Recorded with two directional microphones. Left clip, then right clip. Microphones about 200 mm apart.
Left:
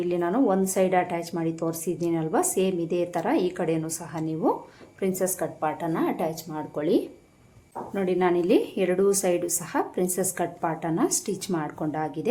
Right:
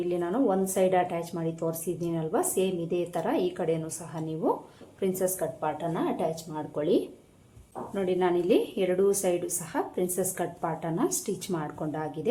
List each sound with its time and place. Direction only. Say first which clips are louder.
0.0 s a woman's voice: left 3 dB; 25° left (ahead or behind)